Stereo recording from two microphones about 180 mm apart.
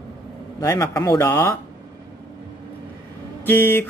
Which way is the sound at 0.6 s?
15° left (ahead or behind).